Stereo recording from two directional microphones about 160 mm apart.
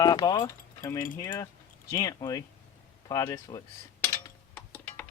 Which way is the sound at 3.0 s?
25° left (ahead or behind).